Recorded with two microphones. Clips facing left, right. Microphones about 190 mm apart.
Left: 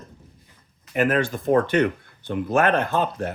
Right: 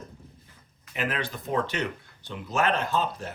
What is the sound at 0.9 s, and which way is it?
Speech, 50° left (ahead or behind).